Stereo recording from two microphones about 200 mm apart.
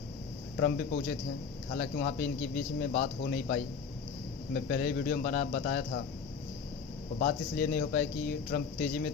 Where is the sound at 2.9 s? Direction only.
50° left (ahead or behind).